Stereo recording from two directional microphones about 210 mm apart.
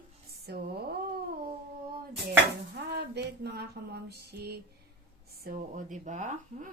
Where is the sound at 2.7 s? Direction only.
50° right (ahead or behind).